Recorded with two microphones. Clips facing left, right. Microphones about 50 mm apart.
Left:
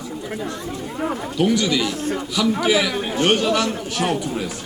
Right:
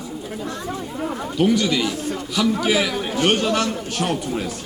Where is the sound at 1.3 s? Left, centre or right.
Centre.